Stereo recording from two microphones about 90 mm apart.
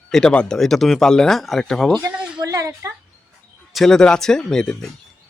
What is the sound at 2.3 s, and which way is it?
Speech, 45° right (ahead or behind).